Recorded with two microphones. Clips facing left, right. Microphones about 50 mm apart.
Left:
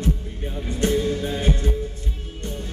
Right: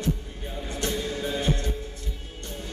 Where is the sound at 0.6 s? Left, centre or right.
Left.